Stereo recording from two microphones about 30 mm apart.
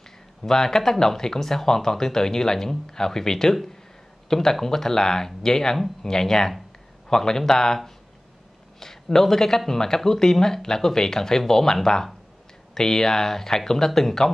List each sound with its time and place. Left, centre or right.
0.4 s speech: centre